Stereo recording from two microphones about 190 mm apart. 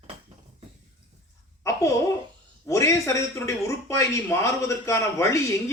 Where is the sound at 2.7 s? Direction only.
15° left (ahead or behind).